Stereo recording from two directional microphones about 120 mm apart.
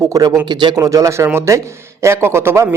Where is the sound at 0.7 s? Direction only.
30° right (ahead or behind).